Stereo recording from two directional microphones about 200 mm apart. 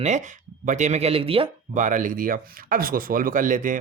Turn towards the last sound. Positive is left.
turn(degrees=-40)  # may be behind; listen again after turning